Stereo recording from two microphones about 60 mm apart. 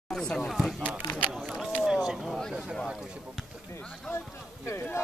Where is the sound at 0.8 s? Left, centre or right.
Right.